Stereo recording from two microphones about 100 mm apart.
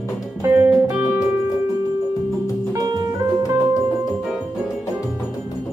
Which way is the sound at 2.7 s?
35° right (ahead or behind).